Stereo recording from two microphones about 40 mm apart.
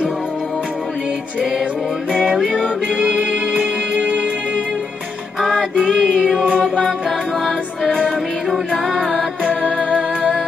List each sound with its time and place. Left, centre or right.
2.2 s music: centre
3.1 s music: right
5.4 s music: centre
9.8 s music: right